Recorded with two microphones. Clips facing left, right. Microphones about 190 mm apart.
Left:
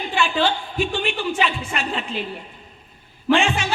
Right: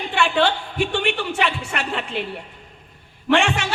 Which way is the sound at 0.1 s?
65° right (ahead or behind).